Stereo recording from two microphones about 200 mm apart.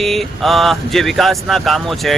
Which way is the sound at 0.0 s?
Centre (ahead or behind).